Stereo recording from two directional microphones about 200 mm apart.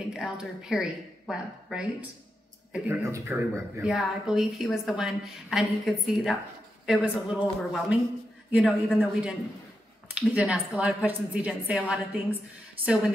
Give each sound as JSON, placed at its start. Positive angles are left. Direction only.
{"t": 0.1, "sound": "a woman's voice", "side_deg": -5}
{"t": 3.9, "sound": "a woman's voice", "side_deg": 0}
{"t": 10.3, "sound": "a woman's voice", "side_deg": -5}